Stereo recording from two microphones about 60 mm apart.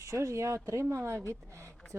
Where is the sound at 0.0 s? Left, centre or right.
Right.